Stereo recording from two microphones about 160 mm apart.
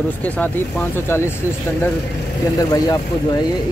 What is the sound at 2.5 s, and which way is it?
Speech, 20° left (ahead or behind).